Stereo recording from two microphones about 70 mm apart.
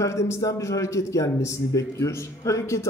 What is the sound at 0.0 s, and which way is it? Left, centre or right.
A man's voice, left.